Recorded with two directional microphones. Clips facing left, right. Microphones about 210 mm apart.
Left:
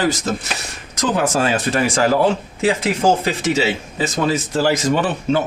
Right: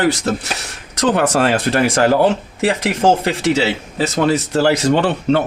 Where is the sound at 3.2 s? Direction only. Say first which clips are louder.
Right 2 dB; 65° right (ahead or behind).